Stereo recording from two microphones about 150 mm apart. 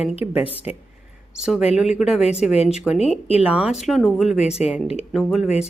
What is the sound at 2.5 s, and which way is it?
Speech, 45° left (ahead or behind).